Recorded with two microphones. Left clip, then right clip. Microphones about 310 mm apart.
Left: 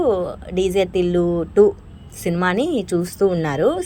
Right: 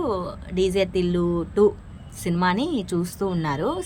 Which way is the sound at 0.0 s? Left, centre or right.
Centre.